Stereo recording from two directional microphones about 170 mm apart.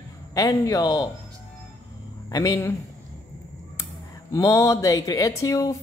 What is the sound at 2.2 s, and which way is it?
Speech, 20° left (ahead or behind).